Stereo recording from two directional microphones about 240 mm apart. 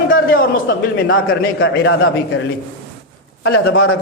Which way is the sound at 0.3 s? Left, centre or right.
Left.